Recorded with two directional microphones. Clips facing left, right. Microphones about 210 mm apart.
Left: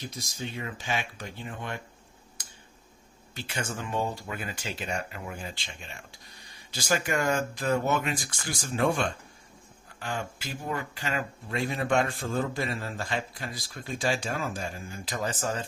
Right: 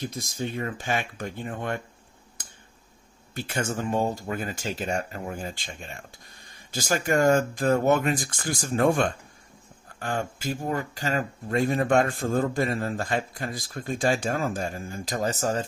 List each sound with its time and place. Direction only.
0.0 s speech: 50° right (ahead or behind)
2.4 s finger snapping: 50° right (ahead or behind)
3.3 s speech: 50° right (ahead or behind)